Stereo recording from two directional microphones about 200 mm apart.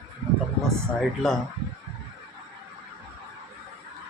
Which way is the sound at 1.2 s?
Centre (ahead or behind).